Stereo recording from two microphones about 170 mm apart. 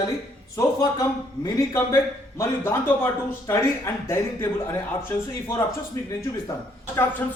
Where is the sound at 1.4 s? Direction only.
20° left (ahead or behind).